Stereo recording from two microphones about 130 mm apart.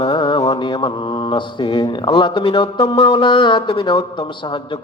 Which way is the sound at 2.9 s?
40° left (ahead or behind).